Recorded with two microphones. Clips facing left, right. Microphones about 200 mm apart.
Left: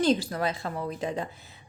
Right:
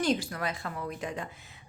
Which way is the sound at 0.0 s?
35° left (ahead or behind).